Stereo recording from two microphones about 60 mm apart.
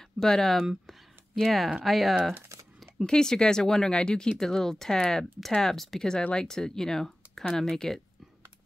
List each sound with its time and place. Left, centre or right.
0.2 s speech: centre